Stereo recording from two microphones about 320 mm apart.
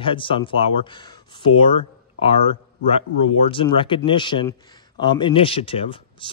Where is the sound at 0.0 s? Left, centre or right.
Centre.